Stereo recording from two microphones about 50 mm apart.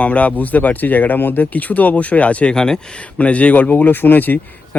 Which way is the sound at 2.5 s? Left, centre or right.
Centre.